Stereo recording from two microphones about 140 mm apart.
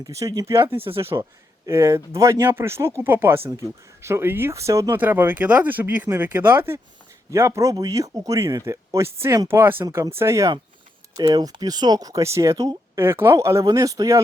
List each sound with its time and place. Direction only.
0.0 s speech: 25° right (ahead or behind)